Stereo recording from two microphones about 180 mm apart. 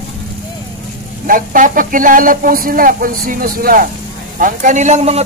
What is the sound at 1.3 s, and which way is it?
A man's voice, 50° right (ahead or behind).